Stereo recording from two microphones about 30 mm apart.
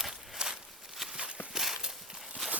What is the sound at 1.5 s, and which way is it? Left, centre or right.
Clip-clop, centre.